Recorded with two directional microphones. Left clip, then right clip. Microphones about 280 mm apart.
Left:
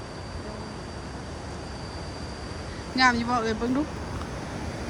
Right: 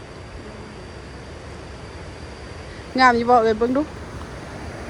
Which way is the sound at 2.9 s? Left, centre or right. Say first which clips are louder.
Right 8 dB; centre.